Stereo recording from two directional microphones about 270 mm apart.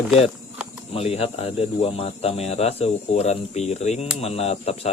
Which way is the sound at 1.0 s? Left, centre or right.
Left.